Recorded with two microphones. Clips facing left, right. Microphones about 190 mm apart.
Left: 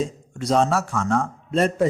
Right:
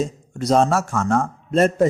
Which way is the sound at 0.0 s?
45° right (ahead or behind).